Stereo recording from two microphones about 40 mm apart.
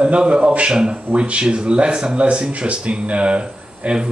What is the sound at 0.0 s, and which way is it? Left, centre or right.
Speech, right.